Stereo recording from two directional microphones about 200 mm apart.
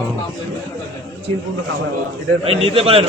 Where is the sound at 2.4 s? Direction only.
30° right (ahead or behind).